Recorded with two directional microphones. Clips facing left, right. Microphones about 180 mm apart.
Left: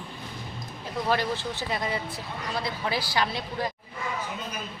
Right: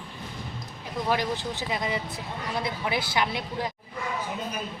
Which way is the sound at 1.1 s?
15° right (ahead or behind).